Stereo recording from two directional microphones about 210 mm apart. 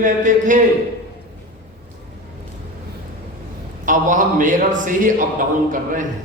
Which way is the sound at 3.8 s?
40° right (ahead or behind).